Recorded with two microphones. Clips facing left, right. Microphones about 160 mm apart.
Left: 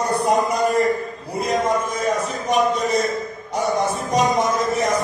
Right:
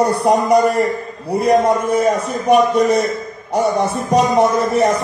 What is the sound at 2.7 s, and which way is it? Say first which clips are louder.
Speech: right 6 dB; 65° right (ahead or behind).